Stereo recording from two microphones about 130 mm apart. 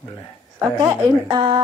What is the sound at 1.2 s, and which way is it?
Speech, 30° right (ahead or behind).